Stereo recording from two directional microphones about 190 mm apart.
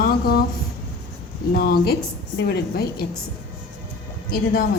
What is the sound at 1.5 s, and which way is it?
Speech, 50° left (ahead or behind).